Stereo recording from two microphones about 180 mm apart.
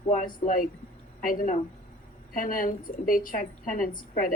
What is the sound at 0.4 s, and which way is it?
A woman's voice, 50° left (ahead or behind).